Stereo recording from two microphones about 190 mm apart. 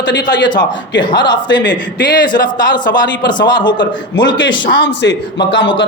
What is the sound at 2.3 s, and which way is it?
A man's voice, 20° left (ahead or behind).